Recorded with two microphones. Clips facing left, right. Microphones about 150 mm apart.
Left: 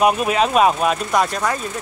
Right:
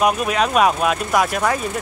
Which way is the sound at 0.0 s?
Centre (ahead or behind).